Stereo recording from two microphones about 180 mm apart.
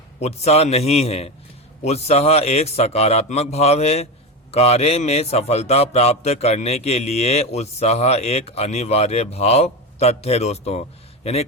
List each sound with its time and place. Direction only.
0.2 s a man's voice: 35° left (ahead or behind)